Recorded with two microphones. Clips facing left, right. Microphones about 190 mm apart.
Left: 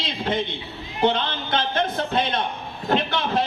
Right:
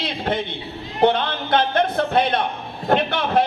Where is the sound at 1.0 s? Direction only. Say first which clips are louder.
Right 4 dB; 55° right (ahead or behind).